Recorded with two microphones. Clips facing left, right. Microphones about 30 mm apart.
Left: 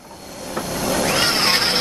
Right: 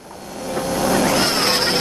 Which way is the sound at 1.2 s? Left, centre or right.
Left.